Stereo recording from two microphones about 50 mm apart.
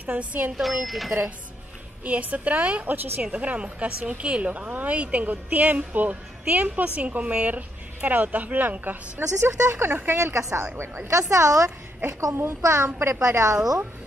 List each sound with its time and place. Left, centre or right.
0.0 s a woman's voice: right
0.6 s speech: centre
2.0 s a woman's voice: right
9.4 s speech: right
10.2 s a woman's voice: right
11.1 s a woman's voice: right
12.1 s a woman's voice: right
12.6 s a woman's voice: right